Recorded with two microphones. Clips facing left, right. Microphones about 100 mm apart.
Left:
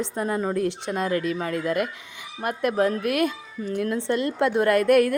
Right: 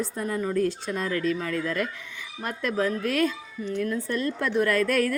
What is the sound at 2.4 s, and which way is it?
A woman's voice, 55° left (ahead or behind).